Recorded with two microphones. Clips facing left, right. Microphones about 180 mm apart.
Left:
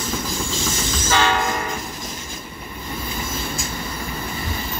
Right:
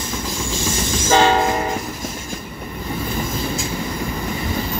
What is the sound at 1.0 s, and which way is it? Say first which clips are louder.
Train: right 6 dB; 30° right (ahead or behind).